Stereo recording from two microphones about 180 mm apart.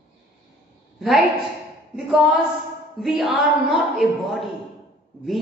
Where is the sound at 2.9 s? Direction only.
Centre (ahead or behind).